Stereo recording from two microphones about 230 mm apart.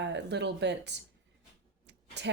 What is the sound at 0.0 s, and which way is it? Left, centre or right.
Speech, right.